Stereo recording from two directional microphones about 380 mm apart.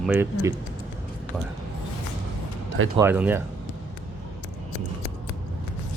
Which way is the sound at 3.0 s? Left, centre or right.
Centre.